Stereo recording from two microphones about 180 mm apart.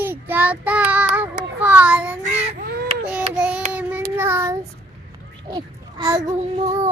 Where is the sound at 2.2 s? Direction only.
55° right (ahead or behind).